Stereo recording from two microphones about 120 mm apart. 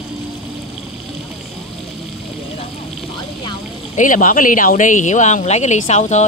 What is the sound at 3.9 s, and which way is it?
Speech, 90° left.